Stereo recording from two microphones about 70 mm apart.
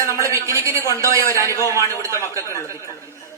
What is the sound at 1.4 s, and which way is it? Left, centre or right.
Speech, left.